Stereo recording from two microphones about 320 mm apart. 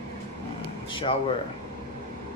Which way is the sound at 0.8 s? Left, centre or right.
Centre.